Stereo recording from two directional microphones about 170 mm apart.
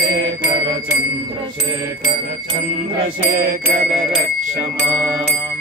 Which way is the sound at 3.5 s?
55° right (ahead or behind).